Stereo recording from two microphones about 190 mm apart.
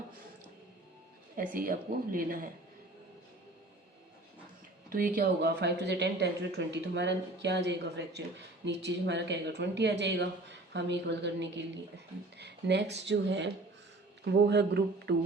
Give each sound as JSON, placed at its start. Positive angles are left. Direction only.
{"t": 1.4, "sound": "a man's voice", "side_deg": -50}
{"t": 4.9, "sound": "a woman's voice", "side_deg": -50}